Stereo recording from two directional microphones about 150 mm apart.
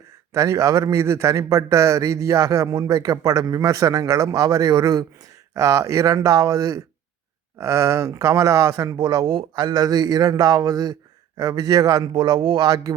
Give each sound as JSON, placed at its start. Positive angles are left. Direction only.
{"t": 0.3, "sound": "speech", "side_deg": -20}